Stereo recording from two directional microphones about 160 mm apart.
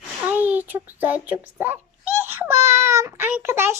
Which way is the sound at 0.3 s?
10° right (ahead or behind).